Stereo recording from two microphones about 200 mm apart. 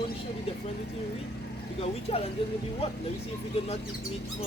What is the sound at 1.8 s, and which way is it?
Speech, 30° left (ahead or behind).